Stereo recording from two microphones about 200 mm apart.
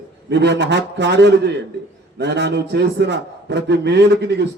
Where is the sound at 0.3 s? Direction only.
60° right (ahead or behind).